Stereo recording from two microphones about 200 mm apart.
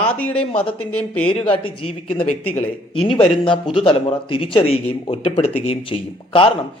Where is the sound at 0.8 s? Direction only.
5° left (ahead or behind).